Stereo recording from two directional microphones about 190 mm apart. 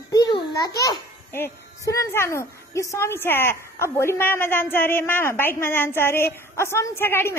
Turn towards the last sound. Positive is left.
turn(degrees=10)  # may be behind; listen again after turning